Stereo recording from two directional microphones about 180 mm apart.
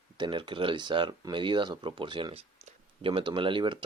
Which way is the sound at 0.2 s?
25° right (ahead or behind).